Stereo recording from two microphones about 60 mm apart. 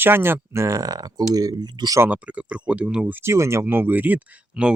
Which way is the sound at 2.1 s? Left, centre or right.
Right.